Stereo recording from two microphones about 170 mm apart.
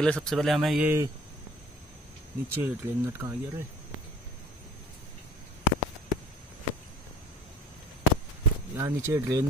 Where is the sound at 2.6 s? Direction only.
15° right (ahead or behind).